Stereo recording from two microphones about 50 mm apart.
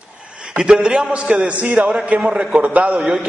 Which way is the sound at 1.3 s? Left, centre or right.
Right.